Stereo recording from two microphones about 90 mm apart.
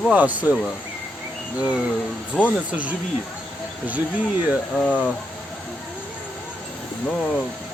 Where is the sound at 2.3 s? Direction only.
Centre (ahead or behind).